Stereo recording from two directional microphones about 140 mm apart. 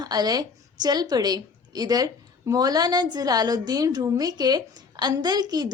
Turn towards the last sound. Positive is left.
turn(degrees=-30)  # may be behind; listen again after turning